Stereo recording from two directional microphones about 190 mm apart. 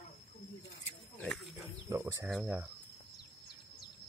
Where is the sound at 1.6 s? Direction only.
15° right (ahead or behind).